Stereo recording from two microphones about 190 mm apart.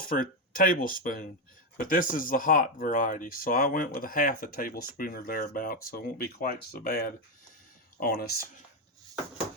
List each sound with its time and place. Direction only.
0.0 s speech: 50° left (ahead or behind)